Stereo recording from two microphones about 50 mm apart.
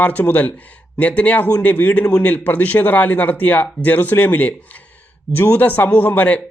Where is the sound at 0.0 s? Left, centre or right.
Left.